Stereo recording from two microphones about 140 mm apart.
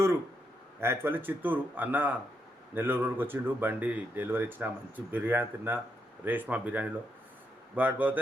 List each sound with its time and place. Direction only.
0.8 s speech: 15° right (ahead or behind)